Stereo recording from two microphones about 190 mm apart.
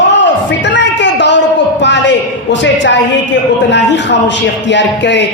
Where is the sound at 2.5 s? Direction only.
70° left (ahead or behind).